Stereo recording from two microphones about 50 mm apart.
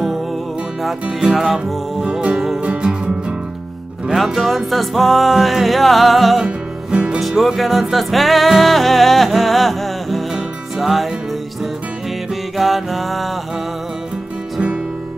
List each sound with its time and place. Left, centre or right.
1.3 s music: centre
4.1 s music: centre
6.4 s music: right
7.2 s music: centre
12.5 s music: centre